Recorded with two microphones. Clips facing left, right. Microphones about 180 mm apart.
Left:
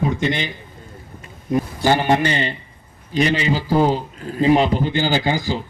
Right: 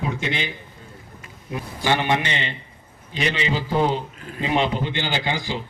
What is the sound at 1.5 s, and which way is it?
Speech, 40° left (ahead or behind).